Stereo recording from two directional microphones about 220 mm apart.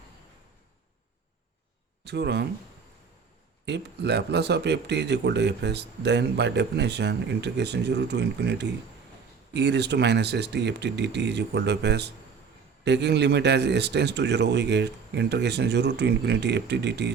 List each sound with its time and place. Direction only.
2.0 s speech: 50° right (ahead or behind)
3.7 s speech: 50° right (ahead or behind)